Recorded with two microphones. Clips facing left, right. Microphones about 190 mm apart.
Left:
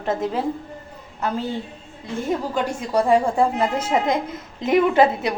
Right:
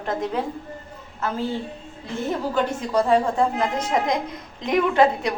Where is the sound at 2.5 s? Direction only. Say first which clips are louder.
Right 2 dB; 10° left (ahead or behind).